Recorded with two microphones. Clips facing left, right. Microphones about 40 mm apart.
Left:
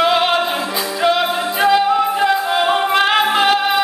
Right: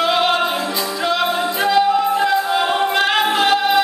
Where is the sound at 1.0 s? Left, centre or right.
Centre.